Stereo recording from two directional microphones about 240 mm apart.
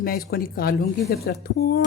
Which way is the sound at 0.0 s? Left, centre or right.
Left.